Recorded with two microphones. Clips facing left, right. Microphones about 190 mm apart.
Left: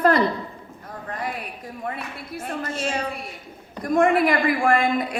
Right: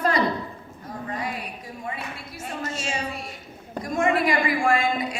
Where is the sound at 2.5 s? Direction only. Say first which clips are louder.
Left 3 dB; 55° left (ahead or behind).